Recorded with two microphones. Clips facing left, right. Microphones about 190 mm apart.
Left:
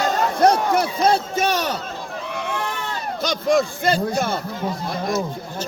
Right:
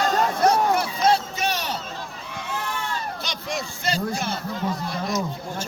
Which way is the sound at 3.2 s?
50° left (ahead or behind).